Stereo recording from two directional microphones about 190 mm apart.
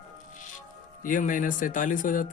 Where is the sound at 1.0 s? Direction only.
45° left (ahead or behind).